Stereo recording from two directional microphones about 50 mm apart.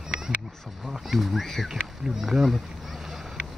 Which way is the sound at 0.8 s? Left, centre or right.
Centre.